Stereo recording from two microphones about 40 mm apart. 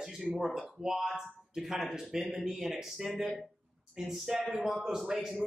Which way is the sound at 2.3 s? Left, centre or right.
Right.